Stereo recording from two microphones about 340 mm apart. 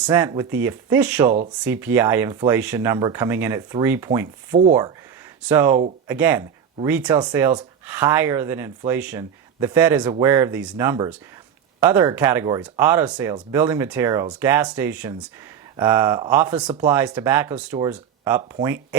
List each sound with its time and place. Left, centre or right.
0.0 s speech: centre
5.4 s speech: centre